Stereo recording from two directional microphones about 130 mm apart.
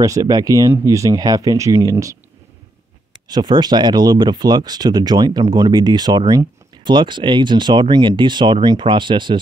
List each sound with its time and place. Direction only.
0.0 s speech: 25° right (ahead or behind)
3.3 s speech: 30° right (ahead or behind)